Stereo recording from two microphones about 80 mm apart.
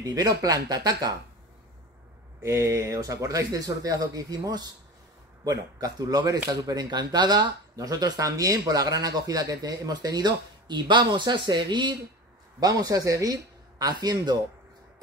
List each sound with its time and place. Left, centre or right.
0.0 s speech: right
2.4 s speech: right
12.5 s speech: right